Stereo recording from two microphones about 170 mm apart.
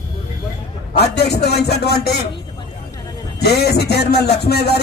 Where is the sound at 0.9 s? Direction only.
70° left (ahead or behind).